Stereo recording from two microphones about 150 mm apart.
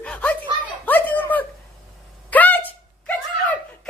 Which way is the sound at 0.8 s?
10° left (ahead or behind).